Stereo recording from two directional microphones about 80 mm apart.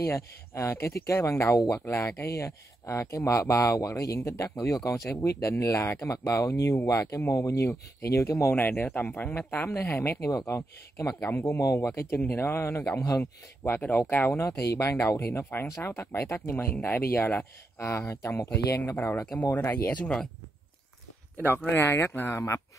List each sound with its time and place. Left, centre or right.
0.0 s speech: left
10.3 s speech: left
11.9 s speech: left
13.2 s speech: left
14.8 s speech: left
17.7 s speech: left
19.5 s speech: left
19.9 s speech: centre
21.6 s speech: left